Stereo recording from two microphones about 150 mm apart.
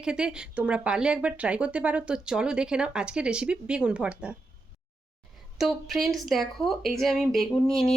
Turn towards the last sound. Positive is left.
turn(degrees=5)  # may be behind; listen again after turning